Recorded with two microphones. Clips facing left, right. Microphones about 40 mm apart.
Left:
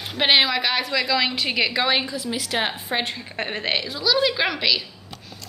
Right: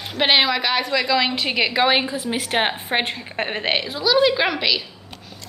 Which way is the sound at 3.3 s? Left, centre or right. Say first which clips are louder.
Right 3 dB; centre.